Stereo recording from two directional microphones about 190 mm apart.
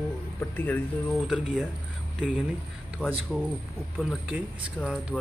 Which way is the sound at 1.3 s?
5° right (ahead or behind).